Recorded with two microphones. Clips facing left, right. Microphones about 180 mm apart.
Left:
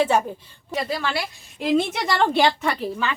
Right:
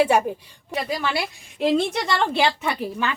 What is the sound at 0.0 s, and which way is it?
A woman's voice, 10° right (ahead or behind).